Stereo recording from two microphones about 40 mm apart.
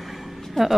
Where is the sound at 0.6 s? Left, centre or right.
Centre.